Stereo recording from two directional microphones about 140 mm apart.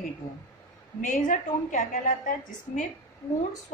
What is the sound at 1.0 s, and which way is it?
A woman's voice, 60° left (ahead or behind).